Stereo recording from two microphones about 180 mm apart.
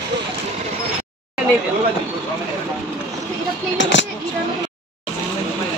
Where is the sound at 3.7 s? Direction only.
90° left.